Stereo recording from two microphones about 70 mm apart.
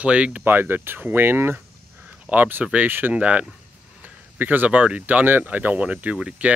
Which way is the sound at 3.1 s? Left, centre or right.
Centre.